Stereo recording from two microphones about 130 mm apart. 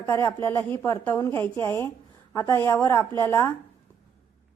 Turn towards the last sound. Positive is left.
turn(degrees=25)  # may be behind; listen again after turning